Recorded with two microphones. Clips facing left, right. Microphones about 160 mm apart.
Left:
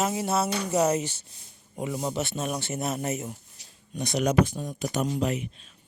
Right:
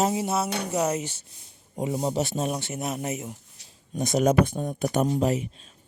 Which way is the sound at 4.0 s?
45° right (ahead or behind).